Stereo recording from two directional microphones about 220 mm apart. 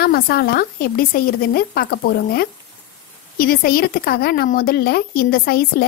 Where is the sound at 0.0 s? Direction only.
45° left (ahead or behind).